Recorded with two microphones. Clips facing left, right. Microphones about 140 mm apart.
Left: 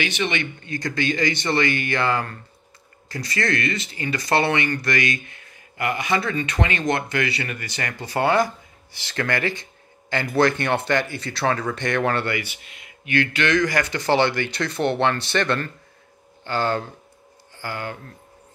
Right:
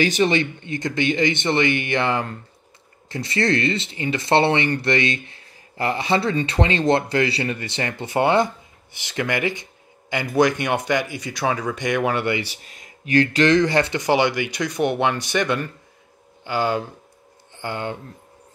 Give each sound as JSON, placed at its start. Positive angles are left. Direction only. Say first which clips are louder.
{"t": 0.0, "sound": "speech", "louder": "right 6 dB", "side_deg": -40}
{"t": 12.4, "sound": "speech", "louder": "right 2 dB", "side_deg": -35}